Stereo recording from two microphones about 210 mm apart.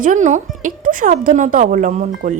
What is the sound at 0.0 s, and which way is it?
A woman's voice, 35° right (ahead or behind).